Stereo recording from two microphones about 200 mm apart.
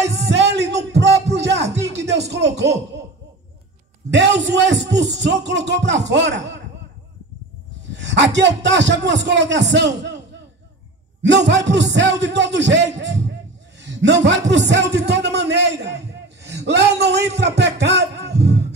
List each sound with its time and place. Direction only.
0.4 s a sound: 60° right (ahead or behind)
1.3 s music: 60° right (ahead or behind)
4.1 s a man's voice: 60° right (ahead or behind)
7.9 s a man's voice: 60° right (ahead or behind)
11.2 s a man's voice: 60° right (ahead or behind)
17.4 s music: 60° right (ahead or behind)